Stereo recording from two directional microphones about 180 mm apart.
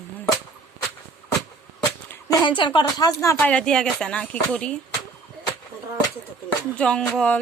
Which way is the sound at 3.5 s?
5° left (ahead or behind).